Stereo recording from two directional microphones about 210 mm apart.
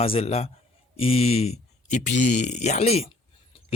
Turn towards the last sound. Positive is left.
turn(degrees=30)  # may be behind; listen again after turning